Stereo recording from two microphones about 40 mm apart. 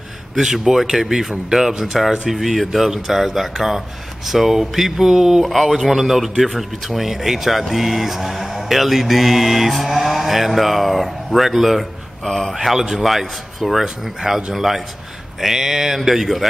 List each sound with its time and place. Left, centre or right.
0.4 s speech: centre
0.9 s mantra: centre
1.5 s speech: centre
2.0 s mantra: centre
4.3 s speech: centre
5.5 s mantra: centre
12.3 s speech: centre
12.5 s speech: centre
13.0 s mantra: centre
14.2 s speech: centre